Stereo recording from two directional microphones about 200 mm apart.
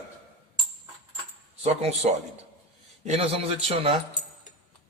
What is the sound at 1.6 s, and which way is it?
A man's voice, 30° right (ahead or behind).